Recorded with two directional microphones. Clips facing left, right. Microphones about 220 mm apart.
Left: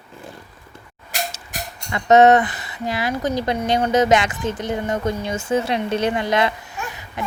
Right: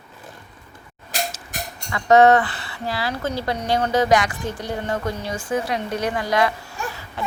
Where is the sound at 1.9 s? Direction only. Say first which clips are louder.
Left 1 dB; 20° left (ahead or behind).